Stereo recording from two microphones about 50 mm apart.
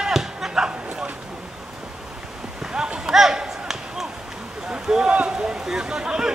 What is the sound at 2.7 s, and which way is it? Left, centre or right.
Basketball bounce, centre.